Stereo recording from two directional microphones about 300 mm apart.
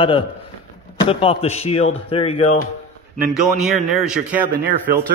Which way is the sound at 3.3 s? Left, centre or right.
Centre.